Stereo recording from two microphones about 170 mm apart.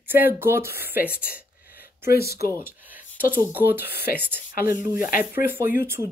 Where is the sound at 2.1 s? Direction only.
65° left (ahead or behind).